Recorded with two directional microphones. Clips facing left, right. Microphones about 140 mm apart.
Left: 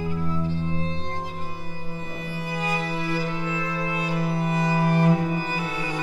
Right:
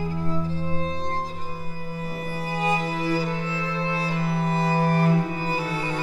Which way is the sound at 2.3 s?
35° right (ahead or behind).